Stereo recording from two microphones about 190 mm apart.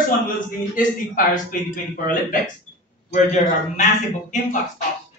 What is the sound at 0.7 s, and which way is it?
Speech, 45° left (ahead or behind).